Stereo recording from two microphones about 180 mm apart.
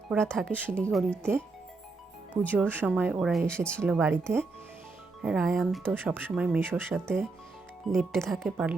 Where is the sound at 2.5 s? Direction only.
10° right (ahead or behind).